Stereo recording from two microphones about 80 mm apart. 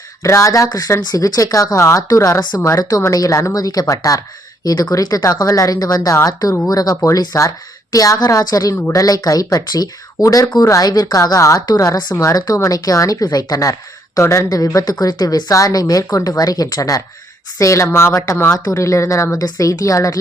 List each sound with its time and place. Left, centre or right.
0.2 s a woman's voice: left
14.2 s speech: left
18.5 s speech: left